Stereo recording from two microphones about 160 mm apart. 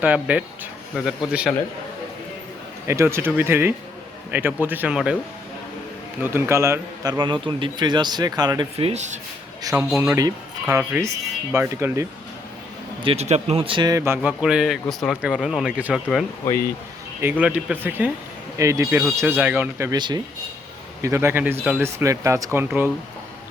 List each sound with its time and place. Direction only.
0.0 s speech: 10° right (ahead or behind)
2.8 s speech: 15° right (ahead or behind)
6.2 s a man's voice: 15° right (ahead or behind)
8.8 s speech: 45° right (ahead or behind)
9.6 s speech: 15° right (ahead or behind)
13.0 s speech: 40° right (ahead or behind); by 14.2 s 20° right (ahead or behind)
14.2 s speech: 5° right (ahead or behind)
16.4 s speech: 15° left (ahead or behind)
17.2 s speech: 10° right (ahead or behind)
19.9 s a man's voice: 25° right (ahead or behind); by 21.8 s 5° right (ahead or behind)
21.9 s speech: 20° right (ahead or behind)